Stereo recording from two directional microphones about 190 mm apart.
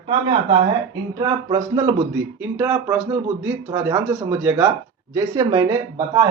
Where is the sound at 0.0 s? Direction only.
30° right (ahead or behind).